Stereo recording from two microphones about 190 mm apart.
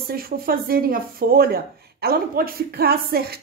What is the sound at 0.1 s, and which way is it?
Speech, 50° right (ahead or behind).